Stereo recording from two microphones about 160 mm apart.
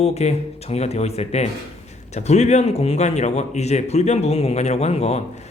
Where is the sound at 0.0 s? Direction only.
40° left (ahead or behind).